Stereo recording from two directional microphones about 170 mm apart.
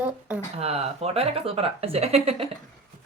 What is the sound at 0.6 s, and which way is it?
Speech, 35° right (ahead or behind).